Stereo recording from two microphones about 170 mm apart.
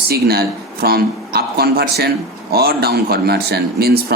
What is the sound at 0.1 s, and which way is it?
Speech, 65° right (ahead or behind).